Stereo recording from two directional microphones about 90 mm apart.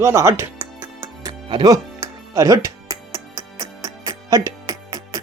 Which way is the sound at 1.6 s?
40° right (ahead or behind).